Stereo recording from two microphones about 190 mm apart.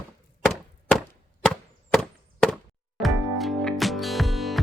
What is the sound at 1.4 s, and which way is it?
Chop, centre (ahead or behind).